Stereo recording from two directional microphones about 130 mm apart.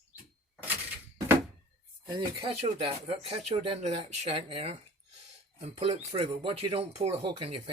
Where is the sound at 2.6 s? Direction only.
50° right (ahead or behind).